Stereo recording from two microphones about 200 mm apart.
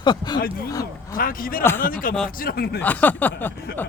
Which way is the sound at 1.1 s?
45° left (ahead or behind).